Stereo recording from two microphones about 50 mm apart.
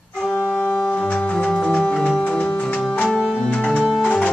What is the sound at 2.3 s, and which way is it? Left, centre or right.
Music, left.